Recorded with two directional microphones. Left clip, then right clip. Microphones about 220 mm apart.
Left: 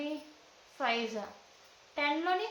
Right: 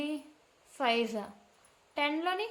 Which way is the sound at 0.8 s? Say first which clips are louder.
Right 2 dB; 55° right (ahead or behind).